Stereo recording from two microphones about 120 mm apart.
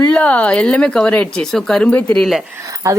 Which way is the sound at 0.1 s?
10° left (ahead or behind).